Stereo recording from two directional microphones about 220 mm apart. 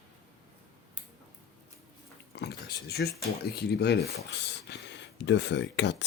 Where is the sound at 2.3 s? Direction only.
50° left (ahead or behind).